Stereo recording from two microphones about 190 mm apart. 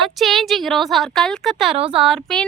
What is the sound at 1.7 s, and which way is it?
Speech, 30° right (ahead or behind).